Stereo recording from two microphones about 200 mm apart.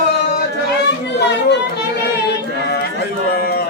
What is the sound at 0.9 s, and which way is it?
Chatter, 60° left (ahead or behind).